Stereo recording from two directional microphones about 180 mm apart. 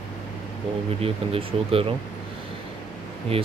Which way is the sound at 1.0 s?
30° right (ahead or behind).